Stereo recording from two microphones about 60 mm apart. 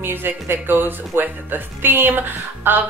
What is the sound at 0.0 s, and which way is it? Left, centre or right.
Speech, right.